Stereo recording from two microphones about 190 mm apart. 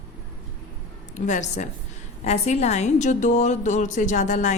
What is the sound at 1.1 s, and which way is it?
A woman's voice, 40° left (ahead or behind).